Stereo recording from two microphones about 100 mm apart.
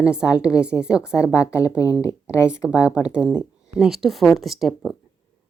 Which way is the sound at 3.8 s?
Centre (ahead or behind).